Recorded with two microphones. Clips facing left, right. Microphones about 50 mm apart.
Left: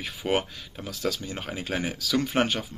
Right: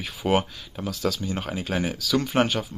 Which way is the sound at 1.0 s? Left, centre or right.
Left.